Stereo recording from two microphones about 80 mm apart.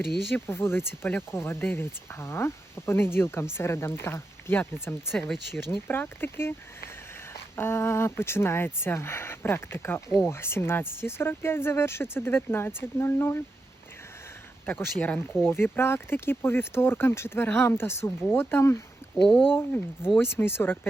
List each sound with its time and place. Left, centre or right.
0.3 s speech: left
5.1 s speech: centre
5.9 s speech: left
14.7 s speech: left
19.1 s speech: centre
19.5 s speech: left